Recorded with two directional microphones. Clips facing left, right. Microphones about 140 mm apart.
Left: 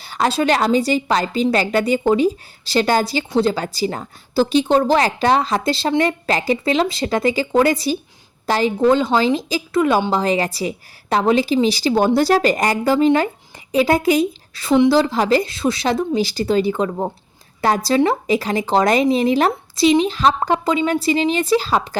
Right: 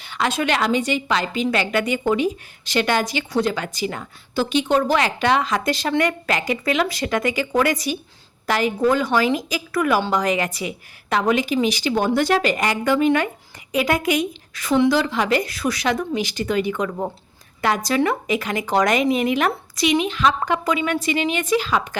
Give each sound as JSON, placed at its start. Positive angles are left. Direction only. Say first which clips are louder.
{"t": 0.0, "sound": "a woman's voice", "louder": "left 4 dB", "side_deg": 35}